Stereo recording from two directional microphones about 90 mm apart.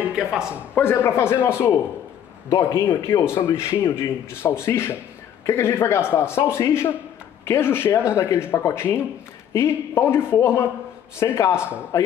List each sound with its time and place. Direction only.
0.1 s speech: 10° right (ahead or behind)
0.7 s speech: 25° left (ahead or behind)
2.8 s speech: 25° left (ahead or behind)